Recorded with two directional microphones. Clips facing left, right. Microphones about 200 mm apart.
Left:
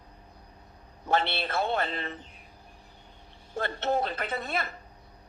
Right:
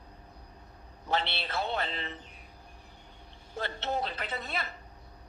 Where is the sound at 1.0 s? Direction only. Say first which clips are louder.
Left 5 dB; 50° left (ahead or behind).